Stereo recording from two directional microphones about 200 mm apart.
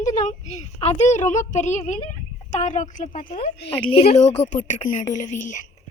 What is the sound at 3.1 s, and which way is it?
Speech, 25° left (ahead or behind).